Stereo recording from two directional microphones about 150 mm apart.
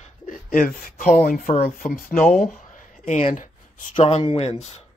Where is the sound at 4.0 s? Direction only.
35° left (ahead or behind).